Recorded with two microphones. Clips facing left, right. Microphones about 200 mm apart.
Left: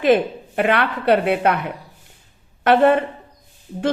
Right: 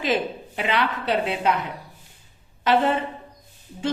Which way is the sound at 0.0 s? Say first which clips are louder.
Left 8 dB; 55° left (ahead or behind).